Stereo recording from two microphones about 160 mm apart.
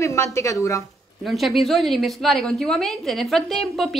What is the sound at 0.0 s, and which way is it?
Speech, 20° left (ahead or behind).